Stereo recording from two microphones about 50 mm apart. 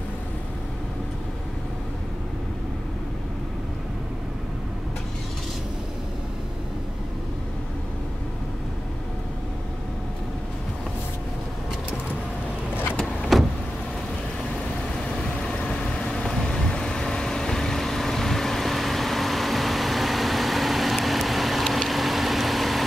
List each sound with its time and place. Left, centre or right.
13.3 s vehicle: centre
15.6 s vehicle: centre